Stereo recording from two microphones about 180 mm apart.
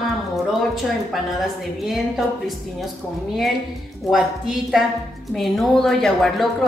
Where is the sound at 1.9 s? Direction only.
Centre (ahead or behind).